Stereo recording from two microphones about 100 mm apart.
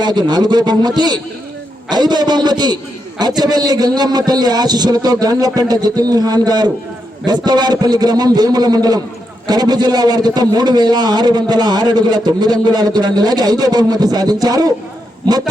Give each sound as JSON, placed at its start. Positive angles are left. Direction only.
{"t": 0.0, "sound": "a man's voice", "side_deg": -45}